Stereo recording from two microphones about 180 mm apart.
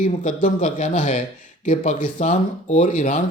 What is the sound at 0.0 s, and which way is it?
Speech, 45° left (ahead or behind).